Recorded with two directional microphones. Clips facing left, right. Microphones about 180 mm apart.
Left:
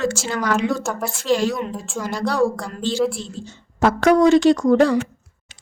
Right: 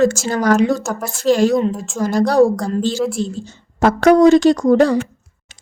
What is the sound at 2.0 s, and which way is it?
A woman's voice, 45° right (ahead or behind).